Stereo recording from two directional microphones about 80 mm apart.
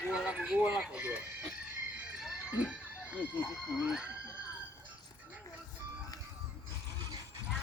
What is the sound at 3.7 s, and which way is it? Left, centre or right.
Speech, centre.